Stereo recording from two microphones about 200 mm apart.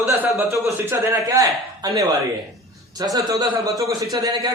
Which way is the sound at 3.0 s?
15° right (ahead or behind).